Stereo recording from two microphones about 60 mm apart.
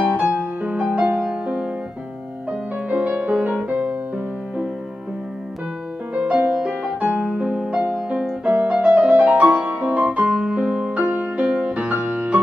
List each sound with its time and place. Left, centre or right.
0.0 s music: right
2.9 s music: right
6.1 s music: centre
11.1 s music: right